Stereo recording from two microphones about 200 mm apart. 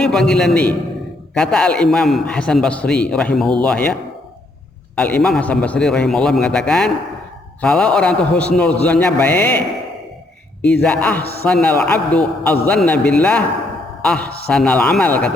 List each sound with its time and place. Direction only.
0.0 s a man's voice: 5° left (ahead or behind)
4.9 s a man's voice: 5° left (ahead or behind)
10.6 s a man's voice: 5° left (ahead or behind)